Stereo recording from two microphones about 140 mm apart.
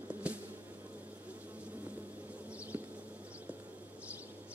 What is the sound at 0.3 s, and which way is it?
Insect, 10° right (ahead or behind).